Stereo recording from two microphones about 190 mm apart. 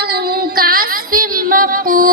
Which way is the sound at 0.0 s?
55° right (ahead or behind).